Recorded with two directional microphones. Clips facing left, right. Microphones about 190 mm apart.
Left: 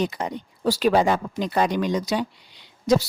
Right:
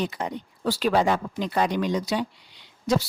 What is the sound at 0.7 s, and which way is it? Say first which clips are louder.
Speech: left 2 dB; 15° left (ahead or behind).